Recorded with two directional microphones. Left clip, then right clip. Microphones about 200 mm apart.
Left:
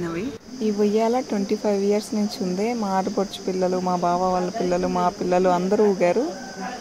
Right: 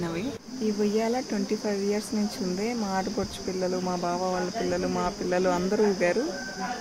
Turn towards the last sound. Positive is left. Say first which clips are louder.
# left 5 dB
turn(degrees=15)  # may be behind; listen again after turning